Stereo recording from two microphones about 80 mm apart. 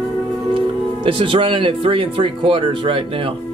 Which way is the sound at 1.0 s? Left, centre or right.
Right.